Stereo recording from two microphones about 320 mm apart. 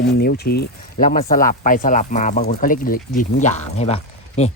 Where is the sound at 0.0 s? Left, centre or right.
Left.